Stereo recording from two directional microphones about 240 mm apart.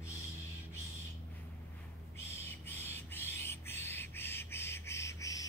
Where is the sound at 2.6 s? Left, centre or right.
Centre.